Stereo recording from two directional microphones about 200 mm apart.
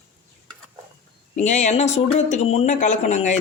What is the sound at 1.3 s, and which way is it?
Speech, 35° left (ahead or behind).